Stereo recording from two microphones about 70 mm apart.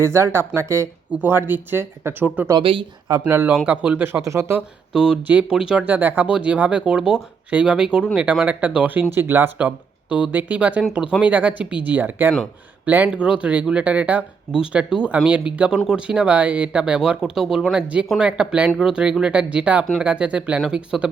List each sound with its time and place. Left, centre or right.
0.0 s speech: right
1.2 s speech: right
2.2 s speech: right
4.2 s speech: right
4.9 s speech: centre
5.2 s speech: centre
5.8 s speech: right
9.6 s speech: centre
13.1 s speech: centre